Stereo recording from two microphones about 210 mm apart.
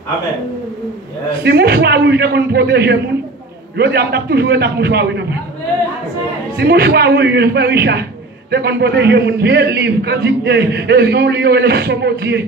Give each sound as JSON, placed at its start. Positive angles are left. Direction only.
{"t": 1.4, "sound": "a man's voice", "side_deg": -50}
{"t": 6.6, "sound": "a man's voice", "side_deg": -50}